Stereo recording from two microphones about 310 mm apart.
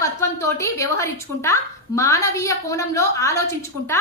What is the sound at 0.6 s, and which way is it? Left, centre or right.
A woman's voice, centre.